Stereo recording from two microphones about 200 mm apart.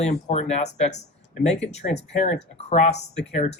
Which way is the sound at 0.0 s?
35° left (ahead or behind).